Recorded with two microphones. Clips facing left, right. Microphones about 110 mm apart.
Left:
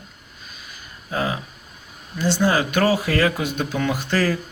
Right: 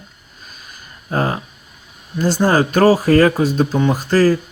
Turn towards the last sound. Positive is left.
turn(degrees=-40)  # may be behind; listen again after turning